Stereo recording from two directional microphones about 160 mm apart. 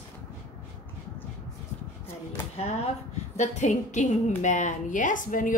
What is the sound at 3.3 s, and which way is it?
Speech, 50° left (ahead or behind).